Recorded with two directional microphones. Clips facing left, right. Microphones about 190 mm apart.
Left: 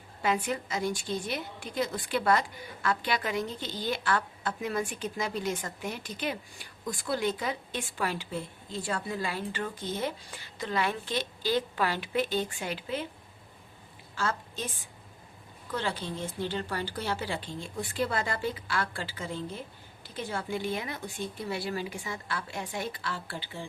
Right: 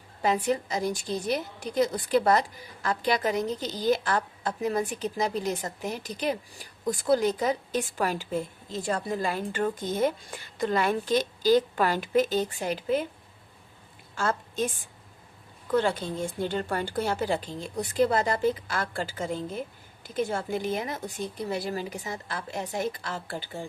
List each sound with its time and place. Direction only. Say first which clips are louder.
0.2 s a woman's voice: right 4 dB; 35° right (ahead or behind)
14.2 s a woman's voice: right 5 dB; 50° right (ahead or behind)